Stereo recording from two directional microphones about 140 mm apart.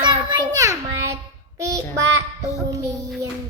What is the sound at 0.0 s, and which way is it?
Child singing, 30° right (ahead or behind).